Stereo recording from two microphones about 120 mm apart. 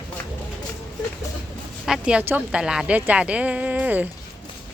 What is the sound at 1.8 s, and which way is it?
A woman's voice, 5° right (ahead or behind).